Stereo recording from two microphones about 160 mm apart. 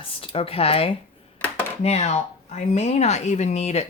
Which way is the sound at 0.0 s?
35° left (ahead or behind).